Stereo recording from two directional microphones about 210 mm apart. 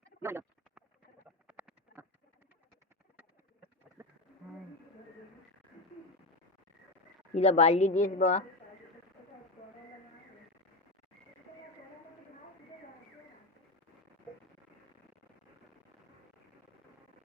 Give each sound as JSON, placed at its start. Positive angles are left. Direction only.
{"t": 0.2, "sound": "speech", "side_deg": -10}
{"t": 1.5, "sound": "a sound", "side_deg": -5}
{"t": 4.0, "sound": "bird", "side_deg": -10}
{"t": 7.3, "sound": "a woman's voice", "side_deg": 30}